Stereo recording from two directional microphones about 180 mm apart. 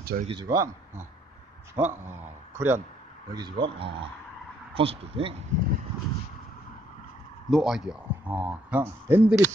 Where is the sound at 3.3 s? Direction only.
25° right (ahead or behind).